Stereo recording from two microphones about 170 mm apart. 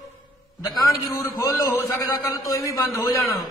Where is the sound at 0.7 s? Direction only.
20° left (ahead or behind).